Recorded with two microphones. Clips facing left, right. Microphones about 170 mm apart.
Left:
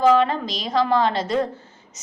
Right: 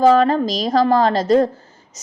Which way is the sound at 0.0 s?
40° right (ahead or behind).